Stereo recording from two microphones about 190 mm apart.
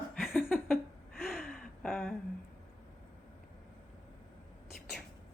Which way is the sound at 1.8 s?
Centre (ahead or behind).